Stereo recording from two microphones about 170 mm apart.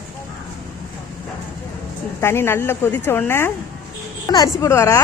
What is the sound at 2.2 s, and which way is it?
Speech, 15° left (ahead or behind).